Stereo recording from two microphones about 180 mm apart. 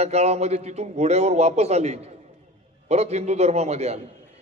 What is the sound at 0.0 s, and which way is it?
A man's voice, 35° right (ahead or behind).